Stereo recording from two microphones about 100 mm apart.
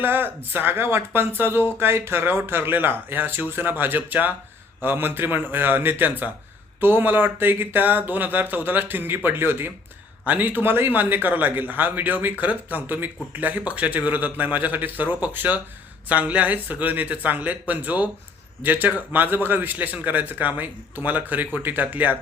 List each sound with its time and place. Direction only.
0.0 s a man's voice: 20° right (ahead or behind)